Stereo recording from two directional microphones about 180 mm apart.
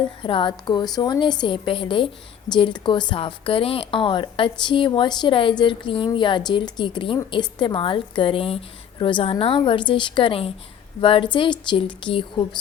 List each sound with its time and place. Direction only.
0.2 s a woman's voice: 30° left (ahead or behind)